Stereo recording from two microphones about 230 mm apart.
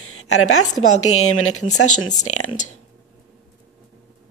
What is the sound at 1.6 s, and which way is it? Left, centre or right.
Speech, left.